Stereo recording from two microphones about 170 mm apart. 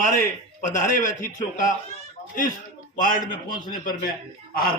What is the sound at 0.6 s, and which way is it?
A man's voice, 45° left (ahead or behind).